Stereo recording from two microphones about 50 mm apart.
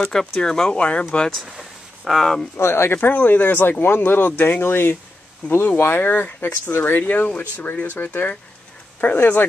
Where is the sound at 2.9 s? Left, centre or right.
Left.